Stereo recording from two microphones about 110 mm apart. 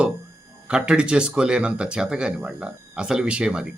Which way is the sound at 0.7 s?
10° right (ahead or behind).